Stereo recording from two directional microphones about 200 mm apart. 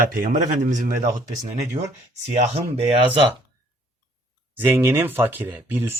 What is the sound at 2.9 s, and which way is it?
Speech, 25° right (ahead or behind).